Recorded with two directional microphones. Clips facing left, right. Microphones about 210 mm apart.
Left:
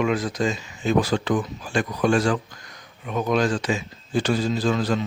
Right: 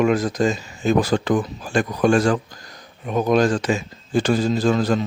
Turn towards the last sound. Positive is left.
turn(degrees=-45)  # may be behind; listen again after turning